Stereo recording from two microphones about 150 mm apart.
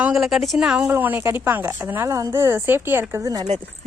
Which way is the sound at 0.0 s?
5° right (ahead or behind).